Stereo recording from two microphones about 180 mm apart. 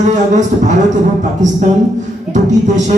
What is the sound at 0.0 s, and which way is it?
Music, 45° right (ahead or behind).